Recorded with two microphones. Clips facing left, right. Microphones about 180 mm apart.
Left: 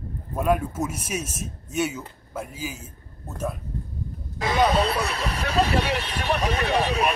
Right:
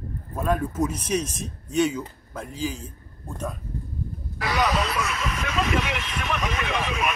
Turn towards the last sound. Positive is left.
turn(degrees=35)  # may be behind; listen again after turning